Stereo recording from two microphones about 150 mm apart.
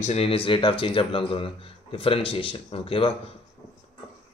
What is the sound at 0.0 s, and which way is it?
Speech, 45° left (ahead or behind).